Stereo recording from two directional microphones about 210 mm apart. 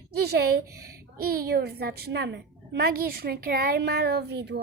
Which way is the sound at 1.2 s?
45° right (ahead or behind).